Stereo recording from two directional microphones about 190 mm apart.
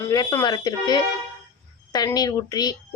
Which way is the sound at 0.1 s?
20° left (ahead or behind).